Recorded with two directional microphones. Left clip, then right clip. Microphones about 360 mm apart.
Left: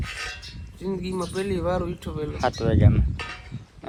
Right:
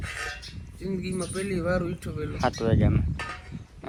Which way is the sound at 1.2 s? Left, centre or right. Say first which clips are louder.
Left 3 dB; centre.